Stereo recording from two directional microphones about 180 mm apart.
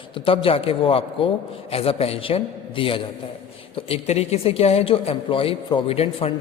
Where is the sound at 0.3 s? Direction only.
30° left (ahead or behind).